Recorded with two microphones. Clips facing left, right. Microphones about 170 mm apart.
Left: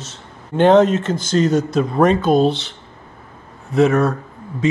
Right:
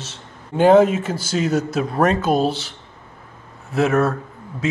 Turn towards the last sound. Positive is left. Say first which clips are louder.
# left 5 dB
turn(degrees=-5)  # may be behind; listen again after turning